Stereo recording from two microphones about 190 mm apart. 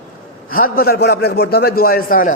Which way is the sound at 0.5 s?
50° left (ahead or behind).